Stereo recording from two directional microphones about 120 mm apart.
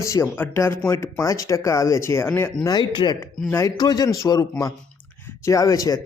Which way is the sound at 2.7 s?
40° left (ahead or behind).